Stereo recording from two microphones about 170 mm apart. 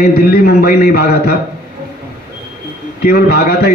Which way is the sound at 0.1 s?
65° left (ahead or behind).